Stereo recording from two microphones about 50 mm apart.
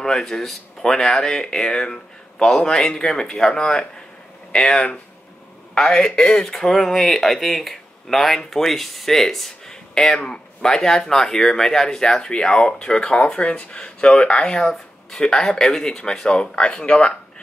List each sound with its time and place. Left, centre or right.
0.0 s speech: centre